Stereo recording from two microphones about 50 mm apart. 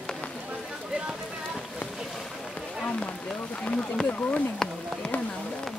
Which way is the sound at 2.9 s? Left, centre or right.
Left.